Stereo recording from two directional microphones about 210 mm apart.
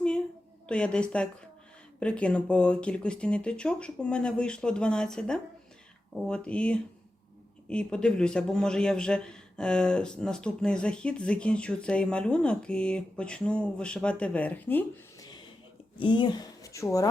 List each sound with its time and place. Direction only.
0.7 s a man's voice: 5° left (ahead or behind)